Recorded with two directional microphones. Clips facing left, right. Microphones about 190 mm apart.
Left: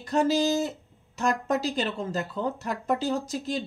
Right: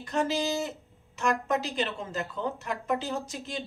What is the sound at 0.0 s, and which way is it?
Speech, 40° left (ahead or behind).